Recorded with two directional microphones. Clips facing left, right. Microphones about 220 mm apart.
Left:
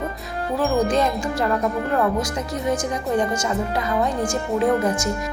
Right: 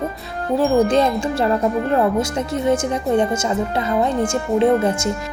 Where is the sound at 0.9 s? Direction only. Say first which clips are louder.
Right 4 dB; 30° right (ahead or behind).